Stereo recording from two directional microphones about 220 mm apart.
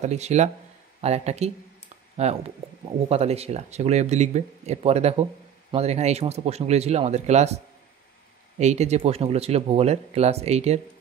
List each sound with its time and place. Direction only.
0.0 s speech: 30° right (ahead or behind)